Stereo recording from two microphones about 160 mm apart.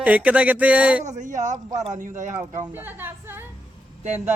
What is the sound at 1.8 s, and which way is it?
Speech, 50° right (ahead or behind).